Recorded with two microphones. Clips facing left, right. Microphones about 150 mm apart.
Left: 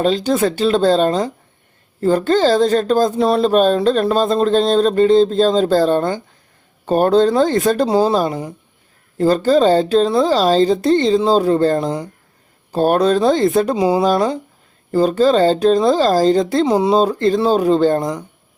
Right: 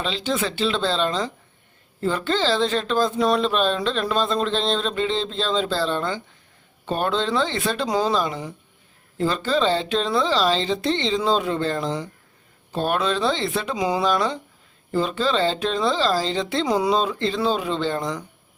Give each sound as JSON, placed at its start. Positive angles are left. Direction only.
{"t": 0.0, "sound": "speech", "side_deg": 45}
{"t": 16.6, "sound": "speech", "side_deg": 25}